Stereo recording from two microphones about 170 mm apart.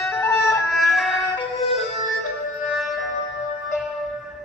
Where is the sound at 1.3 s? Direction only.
35° left (ahead or behind).